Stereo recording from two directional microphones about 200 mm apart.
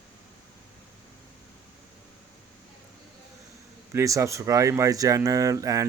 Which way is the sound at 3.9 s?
15° right (ahead or behind).